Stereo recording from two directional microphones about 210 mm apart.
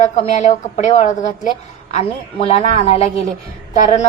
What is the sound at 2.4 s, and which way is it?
A woman's voice, 30° left (ahead or behind).